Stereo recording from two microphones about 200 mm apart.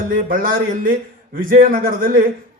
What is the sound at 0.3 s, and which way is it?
Speech, 45° right (ahead or behind).